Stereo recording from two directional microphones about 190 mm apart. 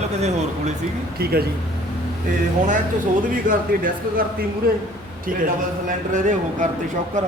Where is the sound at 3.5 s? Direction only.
45° right (ahead or behind).